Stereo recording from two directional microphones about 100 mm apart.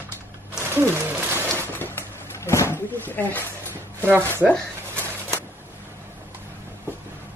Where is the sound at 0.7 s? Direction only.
20° right (ahead or behind).